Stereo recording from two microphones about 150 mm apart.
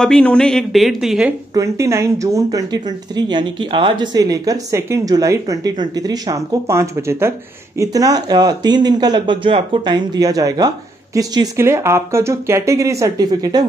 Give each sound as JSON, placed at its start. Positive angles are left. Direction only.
{"t": 0.0, "sound": "speech", "side_deg": 5}
{"t": 1.5, "sound": "speech", "side_deg": -20}